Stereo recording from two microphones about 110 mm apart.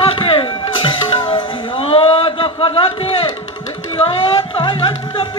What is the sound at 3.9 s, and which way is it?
Music, 55° left (ahead or behind).